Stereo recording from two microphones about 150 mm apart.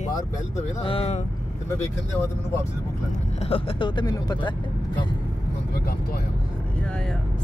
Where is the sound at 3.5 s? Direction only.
40° left (ahead or behind).